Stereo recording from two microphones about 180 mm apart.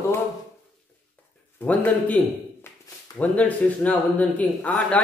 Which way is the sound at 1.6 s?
10° left (ahead or behind).